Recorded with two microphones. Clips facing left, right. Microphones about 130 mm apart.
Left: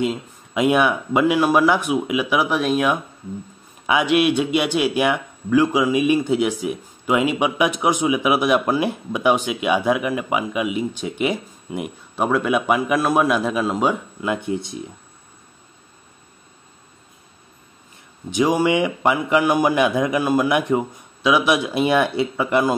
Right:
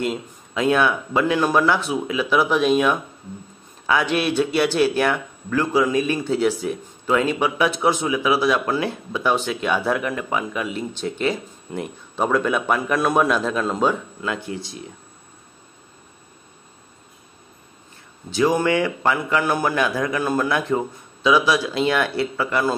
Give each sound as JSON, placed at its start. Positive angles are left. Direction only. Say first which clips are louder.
{"t": 0.6, "sound": "a man's voice", "louder": "left 2 dB", "side_deg": 15}
{"t": 18.3, "sound": "speech", "louder": "left 1 dB", "side_deg": 15}